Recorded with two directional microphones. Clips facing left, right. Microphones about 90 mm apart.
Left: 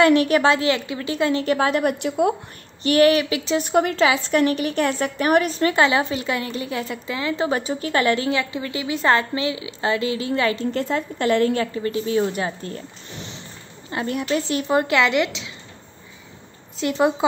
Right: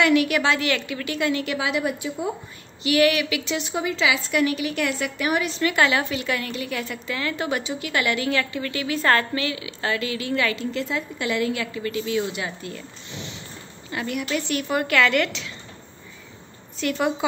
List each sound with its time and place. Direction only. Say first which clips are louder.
0.0 s a woman's voice: left 4 dB; 35° left (ahead or behind); by 2.3 s 65° left (ahead or behind)
2.8 s a woman's voice: left 4 dB; 40° left (ahead or behind)
3.6 s speech: left 8 dB; 55° left (ahead or behind)
4.1 s a woman's voice: left 3 dB; 40° left (ahead or behind)
10.7 s a woman's voice: left 4 dB; 45° left (ahead or behind)
13.8 s a woman's voice: left 4 dB; 30° left (ahead or behind)
16.8 s a woman's voice: left 4 dB; 25° left (ahead or behind)